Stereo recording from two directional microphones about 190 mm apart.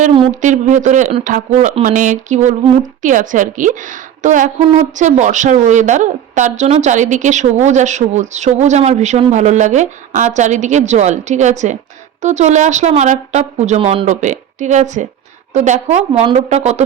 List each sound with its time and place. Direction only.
0.0 s speech: 35° right (ahead or behind)